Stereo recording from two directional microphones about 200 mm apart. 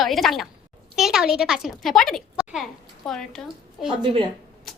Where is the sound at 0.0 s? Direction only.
Centre (ahead or behind).